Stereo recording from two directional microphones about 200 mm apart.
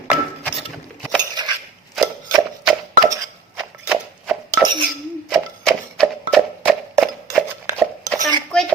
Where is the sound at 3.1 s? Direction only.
15° right (ahead or behind).